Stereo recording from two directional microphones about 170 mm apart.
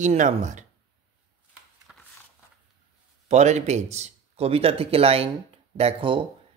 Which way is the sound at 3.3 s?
40° right (ahead or behind).